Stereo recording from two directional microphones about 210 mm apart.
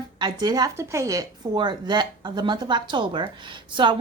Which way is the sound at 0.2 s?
20° right (ahead or behind).